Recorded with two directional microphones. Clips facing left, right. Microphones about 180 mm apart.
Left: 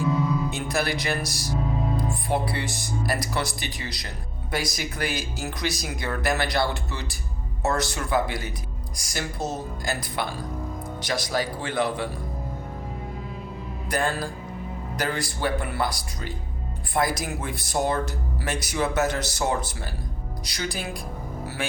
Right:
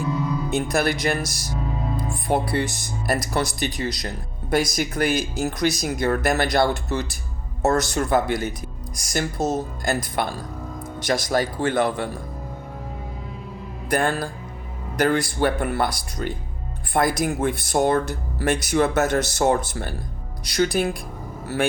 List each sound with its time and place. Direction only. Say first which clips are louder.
0.5 s speech: right 5 dB; 50° right (ahead or behind)
13.9 s speech: right 4 dB; 55° right (ahead or behind)